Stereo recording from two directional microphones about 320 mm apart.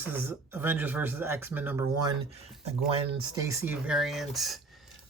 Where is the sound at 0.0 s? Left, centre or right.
Centre.